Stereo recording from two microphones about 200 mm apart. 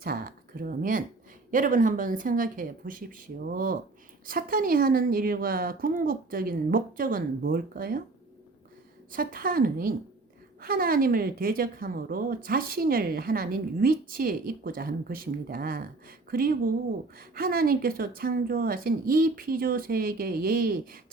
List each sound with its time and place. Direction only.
0.0 s a sound: 45° right (ahead or behind)
1.5 s a woman's voice: 40° right (ahead or behind)
9.1 s a woman's voice: 45° right (ahead or behind)